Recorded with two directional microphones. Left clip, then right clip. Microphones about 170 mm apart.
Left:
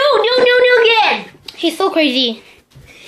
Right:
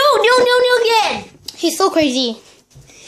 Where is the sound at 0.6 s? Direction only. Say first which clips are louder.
Left 3 dB; 5° right (ahead or behind).